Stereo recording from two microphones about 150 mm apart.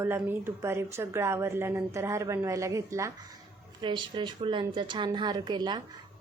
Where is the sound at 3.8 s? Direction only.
30° right (ahead or behind).